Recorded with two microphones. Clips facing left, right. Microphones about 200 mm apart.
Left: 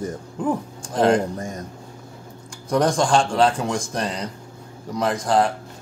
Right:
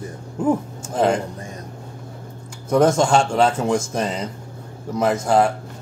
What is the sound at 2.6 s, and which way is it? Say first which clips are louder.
Speech: right 3 dB; 5° right (ahead or behind).